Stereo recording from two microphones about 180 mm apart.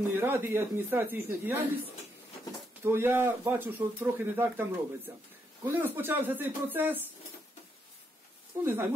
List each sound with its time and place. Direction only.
0.2 s speech: 10° right (ahead or behind)
2.8 s speech: 15° right (ahead or behind)
8.6 s speech: 10° right (ahead or behind)